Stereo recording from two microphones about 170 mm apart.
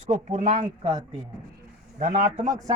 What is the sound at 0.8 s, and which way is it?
Speech, 25° right (ahead or behind).